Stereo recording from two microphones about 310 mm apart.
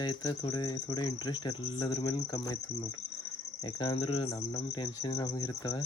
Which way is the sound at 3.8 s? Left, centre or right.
Centre.